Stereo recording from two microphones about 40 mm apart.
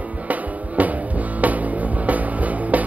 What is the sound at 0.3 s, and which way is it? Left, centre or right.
Music, right.